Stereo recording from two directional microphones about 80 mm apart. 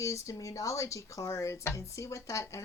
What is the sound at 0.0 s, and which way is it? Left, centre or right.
Speech, left.